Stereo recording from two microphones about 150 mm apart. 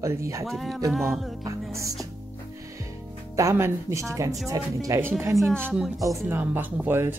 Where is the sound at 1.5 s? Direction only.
20° right (ahead or behind).